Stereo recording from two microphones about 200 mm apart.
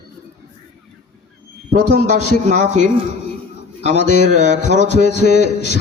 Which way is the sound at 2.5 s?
35° right (ahead or behind).